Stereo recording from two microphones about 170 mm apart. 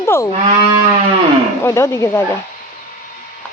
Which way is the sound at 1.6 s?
15° left (ahead or behind).